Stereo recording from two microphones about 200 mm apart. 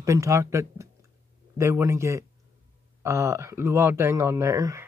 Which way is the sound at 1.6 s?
15° right (ahead or behind).